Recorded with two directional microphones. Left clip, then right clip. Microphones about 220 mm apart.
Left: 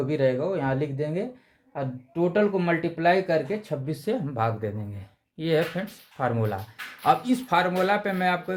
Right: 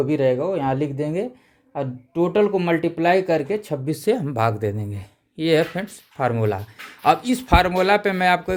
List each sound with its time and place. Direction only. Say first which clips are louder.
0.1 s speech: right 4 dB; 40° right (ahead or behind)